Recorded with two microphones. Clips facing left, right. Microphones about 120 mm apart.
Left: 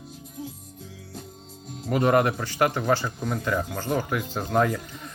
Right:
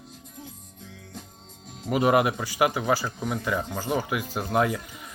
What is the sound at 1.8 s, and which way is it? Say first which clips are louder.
Speech: even; 5° right (ahead or behind).